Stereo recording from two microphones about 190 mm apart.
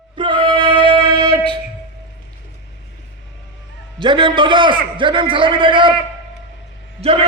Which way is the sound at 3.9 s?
25° right (ahead or behind).